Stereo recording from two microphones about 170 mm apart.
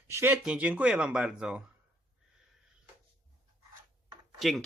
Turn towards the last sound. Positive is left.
turn(degrees=0)  # may be behind; listen again after turning